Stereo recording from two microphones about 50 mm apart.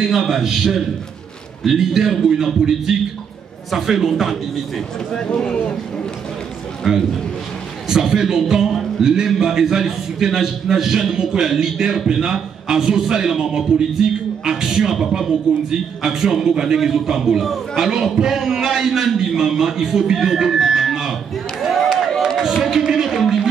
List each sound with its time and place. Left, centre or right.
0.1 s a man's voice: centre
5.1 s speech: centre
6.8 s a man's voice: centre
22.4 s a sound: centre